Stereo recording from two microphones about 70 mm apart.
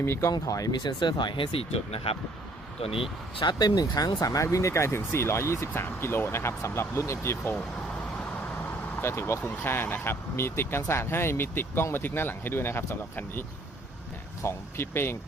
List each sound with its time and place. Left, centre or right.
0.0 s speech: left
0.4 s speech: left
3.4 s speech: left
4.5 s speech: left
9.0 s speech: left
14.4 s speech: left